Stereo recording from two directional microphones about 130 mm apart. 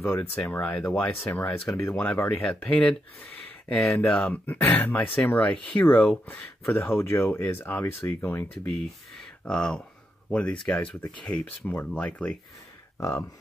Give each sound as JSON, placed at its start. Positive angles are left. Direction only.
{"t": 0.4, "sound": "speech", "side_deg": 10}